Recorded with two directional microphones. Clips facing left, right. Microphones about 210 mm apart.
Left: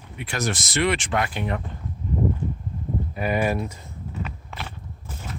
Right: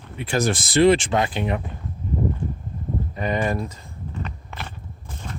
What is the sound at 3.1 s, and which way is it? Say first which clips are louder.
Speech: even; 10° left (ahead or behind).